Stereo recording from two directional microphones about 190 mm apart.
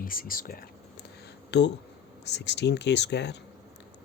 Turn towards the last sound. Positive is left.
turn(degrees=65)  # may be behind; listen again after turning